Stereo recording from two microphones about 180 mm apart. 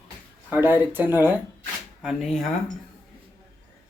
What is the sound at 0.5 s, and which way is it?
Speech, 10° right (ahead or behind).